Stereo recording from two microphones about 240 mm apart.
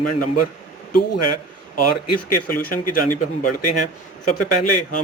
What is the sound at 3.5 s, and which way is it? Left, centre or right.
Speech, left.